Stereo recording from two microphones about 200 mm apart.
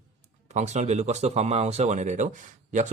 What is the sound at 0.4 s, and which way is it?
Speech, 35° right (ahead or behind).